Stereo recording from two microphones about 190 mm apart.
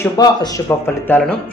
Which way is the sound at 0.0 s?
20° left (ahead or behind).